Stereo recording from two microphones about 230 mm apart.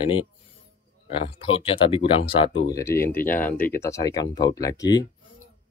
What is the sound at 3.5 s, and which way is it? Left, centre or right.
Speech, left.